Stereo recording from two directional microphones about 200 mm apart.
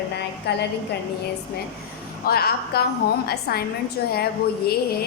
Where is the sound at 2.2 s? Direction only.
50° left (ahead or behind).